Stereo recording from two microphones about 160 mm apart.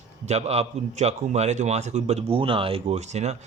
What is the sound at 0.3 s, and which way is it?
Speech, 40° right (ahead or behind).